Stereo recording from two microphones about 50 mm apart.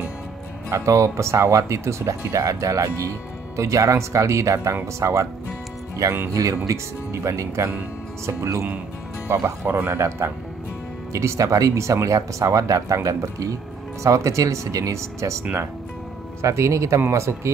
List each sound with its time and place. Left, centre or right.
0.7 s speech: right
6.4 s speech: right
9.7 s speech: right
9.9 s a man's voice: right
11.1 s speech: right